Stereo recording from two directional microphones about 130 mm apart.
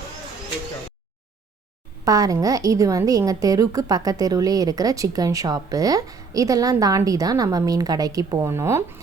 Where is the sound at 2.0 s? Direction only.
25° right (ahead or behind).